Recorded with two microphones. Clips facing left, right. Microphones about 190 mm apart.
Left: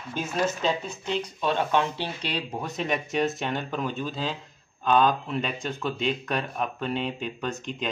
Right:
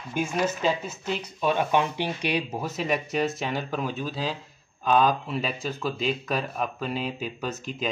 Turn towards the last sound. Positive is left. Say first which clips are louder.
# even
turn(degrees=-5)  # may be behind; listen again after turning